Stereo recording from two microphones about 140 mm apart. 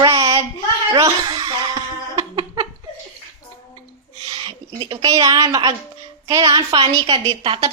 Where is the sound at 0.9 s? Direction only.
25° right (ahead or behind).